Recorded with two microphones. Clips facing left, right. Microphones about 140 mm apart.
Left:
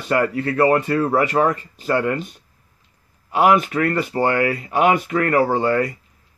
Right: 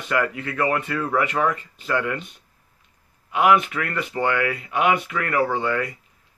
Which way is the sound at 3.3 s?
35° left (ahead or behind).